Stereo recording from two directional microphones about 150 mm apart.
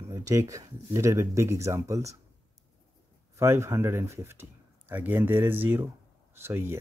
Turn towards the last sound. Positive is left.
turn(degrees=-15)  # may be behind; listen again after turning